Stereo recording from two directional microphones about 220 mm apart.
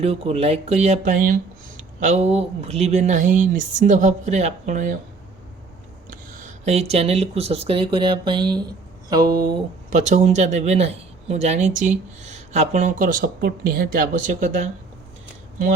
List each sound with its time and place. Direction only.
0.0 s speech: 30° right (ahead or behind)
6.1 s speech: 30° right (ahead or behind)
9.6 s speech: 35° right (ahead or behind)